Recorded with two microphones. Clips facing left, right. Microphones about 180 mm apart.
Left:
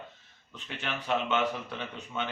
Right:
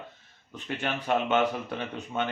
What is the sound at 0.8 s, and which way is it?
Speech, 45° right (ahead or behind).